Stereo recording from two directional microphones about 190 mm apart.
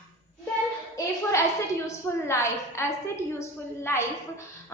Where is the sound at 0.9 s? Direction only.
15° left (ahead or behind).